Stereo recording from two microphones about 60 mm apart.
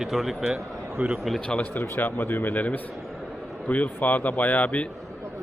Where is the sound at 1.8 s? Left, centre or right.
Left.